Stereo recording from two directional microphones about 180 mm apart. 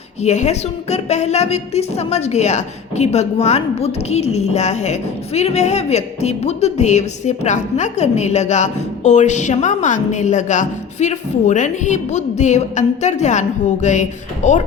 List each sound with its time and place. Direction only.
0.2 s a woman's voice: 40° left (ahead or behind)